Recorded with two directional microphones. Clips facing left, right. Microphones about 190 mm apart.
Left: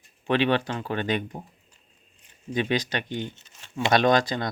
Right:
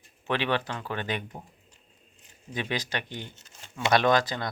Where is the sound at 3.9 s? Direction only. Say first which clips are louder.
Left 2 dB; 25° left (ahead or behind).